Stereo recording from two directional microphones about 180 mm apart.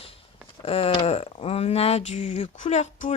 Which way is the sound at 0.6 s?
35° left (ahead or behind).